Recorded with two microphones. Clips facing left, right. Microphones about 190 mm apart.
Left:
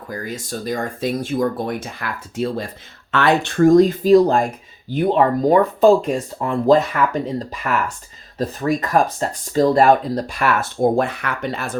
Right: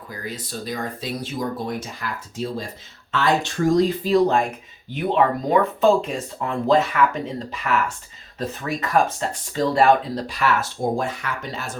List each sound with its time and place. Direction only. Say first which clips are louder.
0.1 s speech: left 5 dB; 45° left (ahead or behind)